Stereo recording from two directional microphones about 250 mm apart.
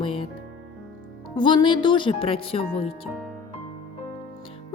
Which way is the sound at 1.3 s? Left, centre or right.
Centre.